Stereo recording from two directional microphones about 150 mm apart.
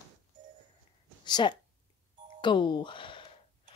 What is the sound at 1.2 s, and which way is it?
Speech, 30° left (ahead or behind).